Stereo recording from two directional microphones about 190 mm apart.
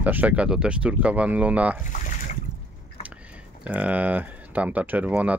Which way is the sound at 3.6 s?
5° right (ahead or behind).